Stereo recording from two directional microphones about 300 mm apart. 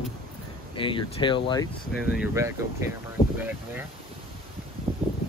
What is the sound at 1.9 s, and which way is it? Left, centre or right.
Speech, centre.